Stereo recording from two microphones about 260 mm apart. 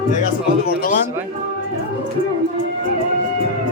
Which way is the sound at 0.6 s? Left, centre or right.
Left.